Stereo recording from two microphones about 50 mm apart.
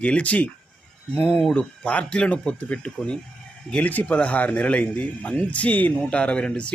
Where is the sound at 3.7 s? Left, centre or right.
Left.